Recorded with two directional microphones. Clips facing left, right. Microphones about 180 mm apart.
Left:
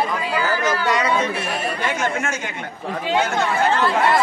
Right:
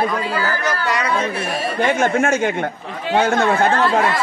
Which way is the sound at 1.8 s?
55° right (ahead or behind).